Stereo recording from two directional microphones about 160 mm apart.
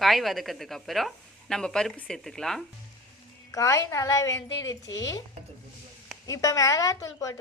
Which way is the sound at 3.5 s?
20° left (ahead or behind).